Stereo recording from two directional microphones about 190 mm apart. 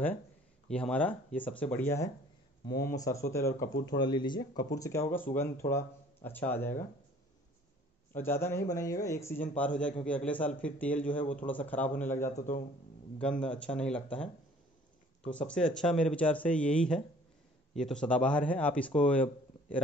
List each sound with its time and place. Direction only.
0.7 s speech: 5° left (ahead or behind)
2.6 s a man's voice: 55° left (ahead or behind)
3.0 s speech: 15° left (ahead or behind)
8.1 s speech: 10° left (ahead or behind)
12.4 s speech: 45° left (ahead or behind)
13.2 s speech: 5° left (ahead or behind)
15.3 s speech: 5° left (ahead or behind)